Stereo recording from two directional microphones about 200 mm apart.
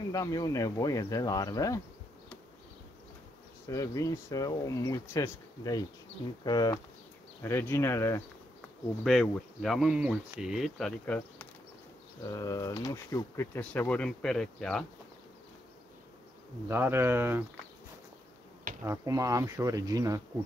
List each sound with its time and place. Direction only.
0.1 s speech: 15° left (ahead or behind)
3.6 s speech: 15° left (ahead or behind)
9.0 s speech: centre (ahead or behind)
16.6 s speech: 10° right (ahead or behind)
18.9 s speech: 15° right (ahead or behind)